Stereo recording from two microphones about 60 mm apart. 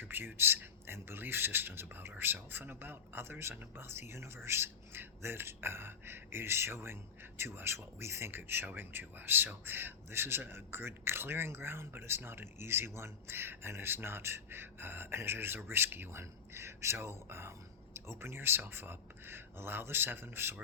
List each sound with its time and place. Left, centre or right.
0.0 s speech: right